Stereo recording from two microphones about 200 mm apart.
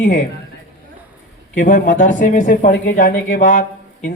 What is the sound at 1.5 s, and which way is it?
A man's voice, 40° left (ahead or behind).